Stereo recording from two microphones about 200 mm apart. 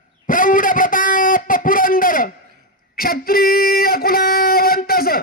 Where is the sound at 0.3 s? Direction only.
40° left (ahead or behind).